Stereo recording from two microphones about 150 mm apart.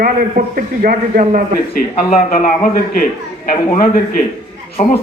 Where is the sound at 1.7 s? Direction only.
85° left.